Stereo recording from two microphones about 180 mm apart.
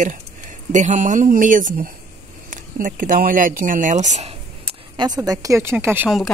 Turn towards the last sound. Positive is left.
turn(degrees=-5)  # may be behind; listen again after turning